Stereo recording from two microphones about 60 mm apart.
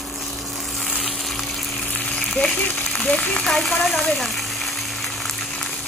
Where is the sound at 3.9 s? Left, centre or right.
Centre.